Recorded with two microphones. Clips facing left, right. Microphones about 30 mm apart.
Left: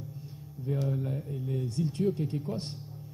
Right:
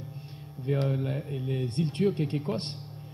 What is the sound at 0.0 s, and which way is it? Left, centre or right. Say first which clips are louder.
A man's voice: right 1 dB; right.